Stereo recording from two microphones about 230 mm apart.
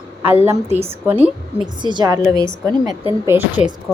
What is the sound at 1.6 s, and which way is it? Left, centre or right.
A woman's voice, centre.